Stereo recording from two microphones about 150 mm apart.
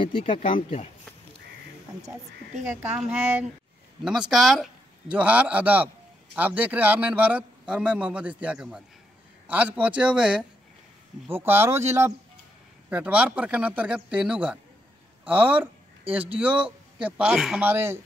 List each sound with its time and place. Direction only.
0.3 s speech: 40° left (ahead or behind)
2.7 s a man's voice: 10° right (ahead or behind)
17.6 s a man's voice: 15° right (ahead or behind)